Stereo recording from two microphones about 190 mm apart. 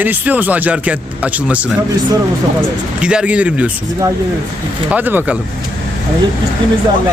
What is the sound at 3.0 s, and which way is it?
Speech, 5° right (ahead or behind).